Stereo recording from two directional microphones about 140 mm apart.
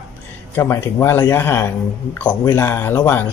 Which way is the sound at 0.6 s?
15° left (ahead or behind).